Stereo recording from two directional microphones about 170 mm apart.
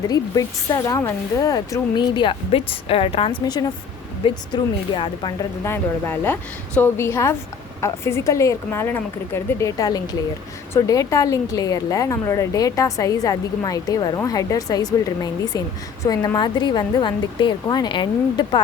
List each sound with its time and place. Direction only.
0.1 s speech: 20° left (ahead or behind)
5.6 s speech: 15° left (ahead or behind)